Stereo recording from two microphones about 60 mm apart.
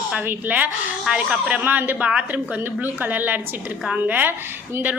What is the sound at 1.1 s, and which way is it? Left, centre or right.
Speech, centre.